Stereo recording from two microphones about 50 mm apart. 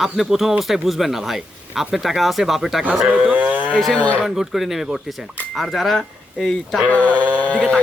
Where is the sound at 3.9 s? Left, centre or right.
Left.